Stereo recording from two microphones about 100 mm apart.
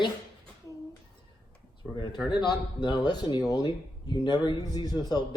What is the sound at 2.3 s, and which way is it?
Speech, 45° left (ahead or behind).